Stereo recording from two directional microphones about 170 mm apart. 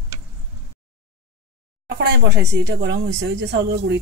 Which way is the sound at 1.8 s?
85° right.